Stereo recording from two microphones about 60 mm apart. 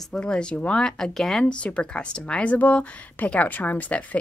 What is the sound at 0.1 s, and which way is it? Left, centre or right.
Speech, centre.